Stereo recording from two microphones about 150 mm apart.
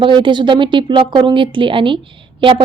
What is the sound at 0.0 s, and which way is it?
Speech, 35° right (ahead or behind).